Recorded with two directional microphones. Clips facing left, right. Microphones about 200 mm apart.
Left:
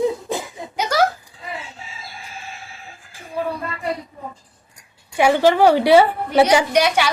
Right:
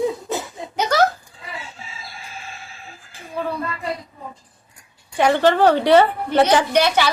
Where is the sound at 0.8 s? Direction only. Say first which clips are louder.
Right 1 dB; 10° left (ahead or behind).